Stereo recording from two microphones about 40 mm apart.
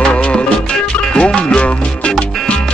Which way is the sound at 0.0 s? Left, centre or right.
Left.